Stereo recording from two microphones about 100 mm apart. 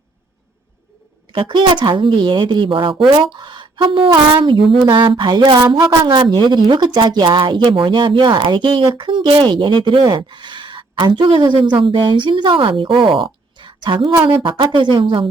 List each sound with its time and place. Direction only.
1.3 s speech: 55° right (ahead or behind)
3.3 s a sound: 50° right (ahead or behind)
4.1 s a woman's voice: 55° right (ahead or behind)